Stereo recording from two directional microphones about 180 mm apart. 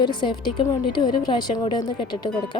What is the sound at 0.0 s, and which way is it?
A woman's voice, 25° left (ahead or behind).